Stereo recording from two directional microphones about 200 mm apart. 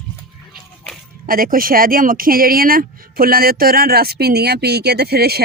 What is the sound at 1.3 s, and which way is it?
Speech, 45° right (ahead or behind).